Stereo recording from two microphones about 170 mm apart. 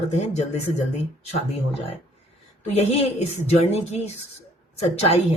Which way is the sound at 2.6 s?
40° left (ahead or behind).